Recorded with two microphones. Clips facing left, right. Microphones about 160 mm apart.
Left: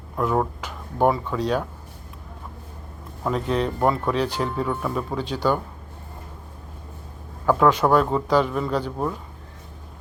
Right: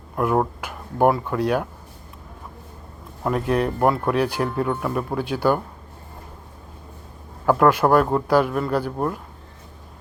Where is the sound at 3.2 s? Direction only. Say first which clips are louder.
Right 2 dB; 5° right (ahead or behind).